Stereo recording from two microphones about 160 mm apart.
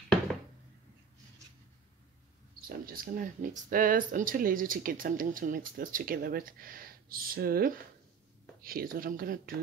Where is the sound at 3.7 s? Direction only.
60° right (ahead or behind).